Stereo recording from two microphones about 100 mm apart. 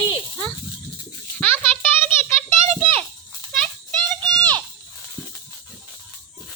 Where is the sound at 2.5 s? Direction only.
70° right (ahead or behind).